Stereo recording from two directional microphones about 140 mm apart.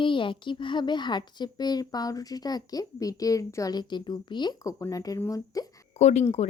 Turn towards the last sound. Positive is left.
turn(degrees=50)  # may be behind; listen again after turning